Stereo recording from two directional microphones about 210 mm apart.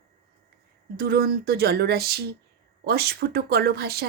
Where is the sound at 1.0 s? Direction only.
45° right (ahead or behind).